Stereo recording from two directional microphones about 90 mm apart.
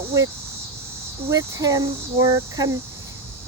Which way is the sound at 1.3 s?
40° right (ahead or behind).